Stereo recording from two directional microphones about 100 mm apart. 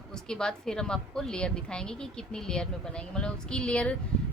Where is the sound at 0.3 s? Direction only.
5° left (ahead or behind).